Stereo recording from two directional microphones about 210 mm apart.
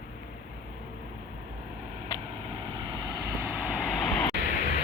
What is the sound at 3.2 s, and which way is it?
Vehicle, 10° right (ahead or behind).